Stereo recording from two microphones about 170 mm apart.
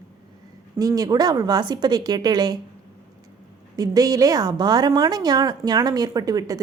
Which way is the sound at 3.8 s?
20° right (ahead or behind).